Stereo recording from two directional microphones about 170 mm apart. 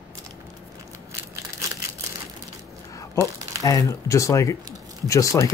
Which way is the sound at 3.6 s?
20° left (ahead or behind).